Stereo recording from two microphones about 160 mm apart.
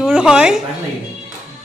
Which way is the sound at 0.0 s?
5° right (ahead or behind).